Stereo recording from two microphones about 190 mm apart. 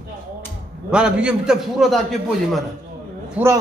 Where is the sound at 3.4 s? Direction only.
10° right (ahead or behind).